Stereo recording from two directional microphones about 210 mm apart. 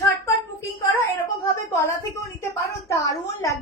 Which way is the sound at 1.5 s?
10° left (ahead or behind).